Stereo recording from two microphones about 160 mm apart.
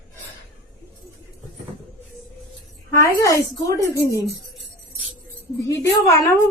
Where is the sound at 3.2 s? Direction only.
20° left (ahead or behind).